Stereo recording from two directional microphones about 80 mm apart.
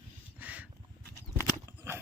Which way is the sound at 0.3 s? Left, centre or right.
Centre.